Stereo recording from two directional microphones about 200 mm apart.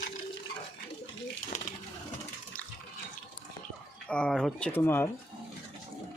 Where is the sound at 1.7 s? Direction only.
40° left (ahead or behind).